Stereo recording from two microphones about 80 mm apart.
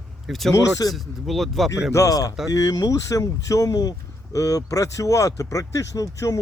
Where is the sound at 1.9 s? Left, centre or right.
Left.